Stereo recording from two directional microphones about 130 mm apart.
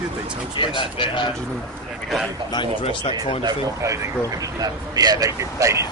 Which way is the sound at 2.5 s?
40° left (ahead or behind).